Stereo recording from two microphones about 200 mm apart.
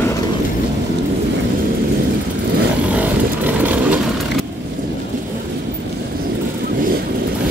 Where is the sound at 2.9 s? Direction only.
5° right (ahead or behind).